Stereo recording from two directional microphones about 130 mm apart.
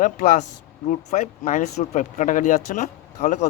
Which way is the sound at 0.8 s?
65° left (ahead or behind).